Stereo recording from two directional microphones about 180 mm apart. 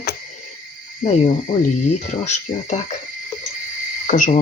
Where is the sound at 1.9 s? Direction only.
40° left (ahead or behind).